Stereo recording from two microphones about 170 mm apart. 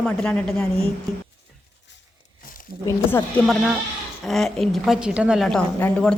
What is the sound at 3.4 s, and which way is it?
A woman's voice, centre (ahead or behind).